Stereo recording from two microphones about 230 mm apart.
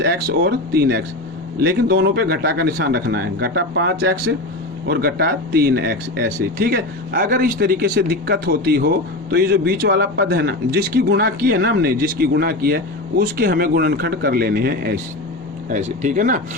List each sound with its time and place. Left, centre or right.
0.0 s a man's voice: right
15.7 s speech: right